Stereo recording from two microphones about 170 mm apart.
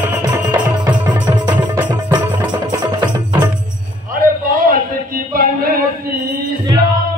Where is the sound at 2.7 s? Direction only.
25° right (ahead or behind).